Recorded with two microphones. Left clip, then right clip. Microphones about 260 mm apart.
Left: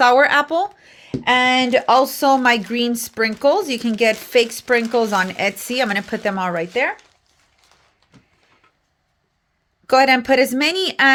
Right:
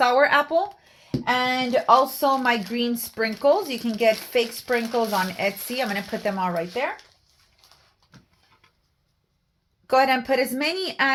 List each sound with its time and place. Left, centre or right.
0.0 s speech: left
9.8 s speech: left